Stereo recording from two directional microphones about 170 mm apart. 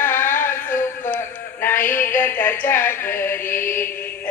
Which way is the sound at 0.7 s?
50° left (ahead or behind).